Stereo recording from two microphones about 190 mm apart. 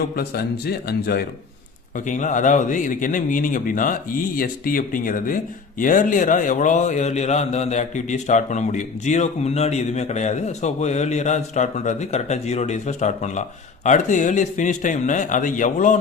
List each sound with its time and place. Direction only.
0.2 s speech: 55° left (ahead or behind)
2.0 s a man's voice: 40° left (ahead or behind)